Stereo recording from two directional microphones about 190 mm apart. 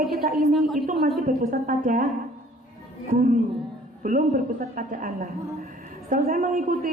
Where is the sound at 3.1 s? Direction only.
45° right (ahead or behind).